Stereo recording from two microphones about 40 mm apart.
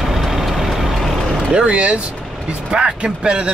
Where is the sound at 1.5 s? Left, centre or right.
Right.